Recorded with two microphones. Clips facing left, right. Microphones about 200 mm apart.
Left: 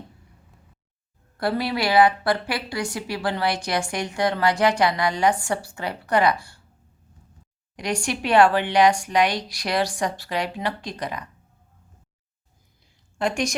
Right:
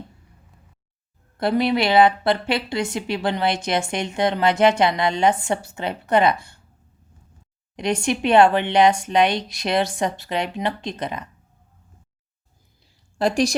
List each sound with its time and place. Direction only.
1.4 s a woman's voice: 20° right (ahead or behind)
7.8 s a woman's voice: 25° right (ahead or behind)
13.1 s a woman's voice: 35° right (ahead or behind)